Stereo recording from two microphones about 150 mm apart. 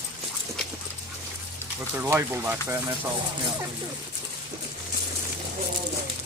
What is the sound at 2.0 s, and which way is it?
Speech, 15° right (ahead or behind).